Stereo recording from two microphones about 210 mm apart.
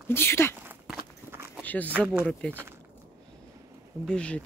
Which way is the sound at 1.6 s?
10° left (ahead or behind).